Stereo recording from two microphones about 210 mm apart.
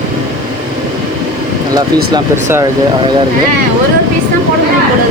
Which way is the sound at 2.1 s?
10° right (ahead or behind).